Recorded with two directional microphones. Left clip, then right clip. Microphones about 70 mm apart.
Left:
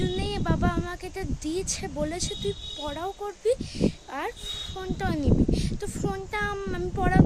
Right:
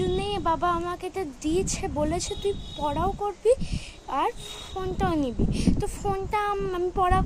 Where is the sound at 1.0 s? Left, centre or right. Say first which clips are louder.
Right 4 dB; left.